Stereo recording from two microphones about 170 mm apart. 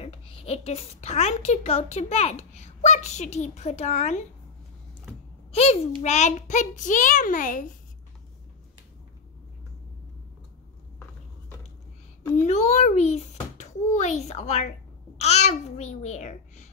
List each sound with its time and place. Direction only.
0.0 s a woman's voice: 35° left (ahead or behind)
5.5 s a child's voice: 40° left (ahead or behind)
12.4 s a woman's voice: 40° left (ahead or behind)